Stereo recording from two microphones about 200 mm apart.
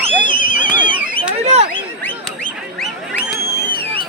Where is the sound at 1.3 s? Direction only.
35° right (ahead or behind).